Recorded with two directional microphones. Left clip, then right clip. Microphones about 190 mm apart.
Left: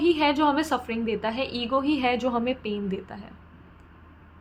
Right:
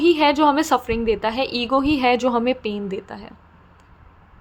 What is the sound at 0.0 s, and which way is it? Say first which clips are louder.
A woman's voice: right 6 dB; 25° right (ahead or behind).